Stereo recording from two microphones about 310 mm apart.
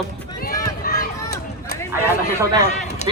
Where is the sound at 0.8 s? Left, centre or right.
Left.